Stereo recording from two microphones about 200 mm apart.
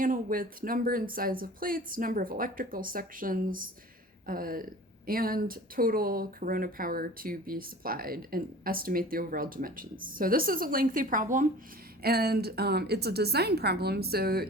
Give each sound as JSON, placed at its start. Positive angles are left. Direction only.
{"t": 0.0, "sound": "speech", "side_deg": -45}
{"t": 12.0, "sound": "speech", "side_deg": -50}